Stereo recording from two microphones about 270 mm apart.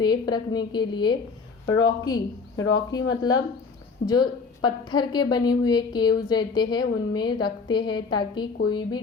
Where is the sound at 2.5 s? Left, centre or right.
Left.